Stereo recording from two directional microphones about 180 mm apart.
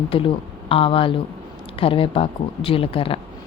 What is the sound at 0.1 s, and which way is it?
A woman's voice, 30° left (ahead or behind).